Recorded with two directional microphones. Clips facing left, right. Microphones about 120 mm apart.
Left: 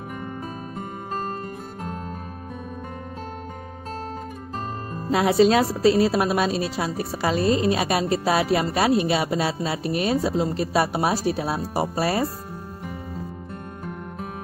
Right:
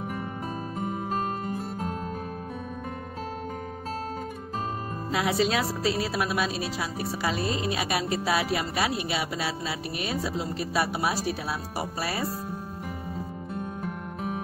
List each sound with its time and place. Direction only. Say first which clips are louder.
0.7 s music: right 2 dB; centre (ahead or behind)
5.1 s a woman's voice: left 8 dB; 40° left (ahead or behind)